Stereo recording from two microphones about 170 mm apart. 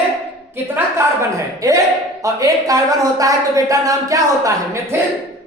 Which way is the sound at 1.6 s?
20° right (ahead or behind).